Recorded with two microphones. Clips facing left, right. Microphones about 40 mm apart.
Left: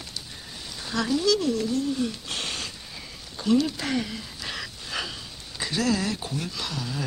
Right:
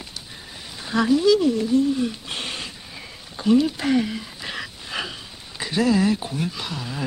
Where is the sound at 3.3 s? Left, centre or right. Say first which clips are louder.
Right 4 dB; centre.